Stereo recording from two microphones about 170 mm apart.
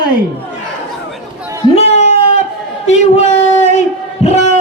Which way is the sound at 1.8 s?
40° left (ahead or behind).